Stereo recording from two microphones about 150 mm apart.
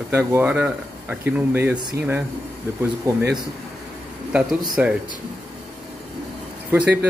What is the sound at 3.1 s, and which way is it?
Speech, 20° right (ahead or behind).